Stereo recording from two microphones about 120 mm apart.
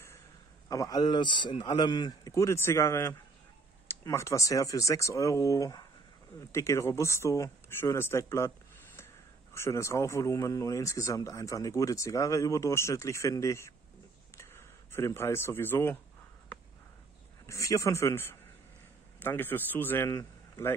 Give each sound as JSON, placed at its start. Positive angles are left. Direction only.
{"t": 0.7, "sound": "speech", "side_deg": 30}
{"t": 14.3, "sound": "a sound", "side_deg": 20}
{"t": 17.5, "sound": "a man's voice", "side_deg": 25}